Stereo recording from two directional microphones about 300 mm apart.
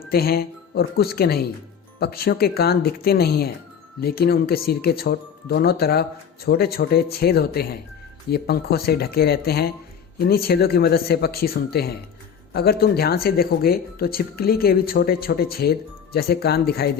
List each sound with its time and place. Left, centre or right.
0.1 s speech: left